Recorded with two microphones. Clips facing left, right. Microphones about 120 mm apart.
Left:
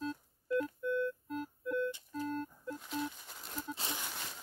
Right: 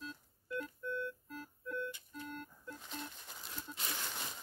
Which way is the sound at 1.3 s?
25° left (ahead or behind).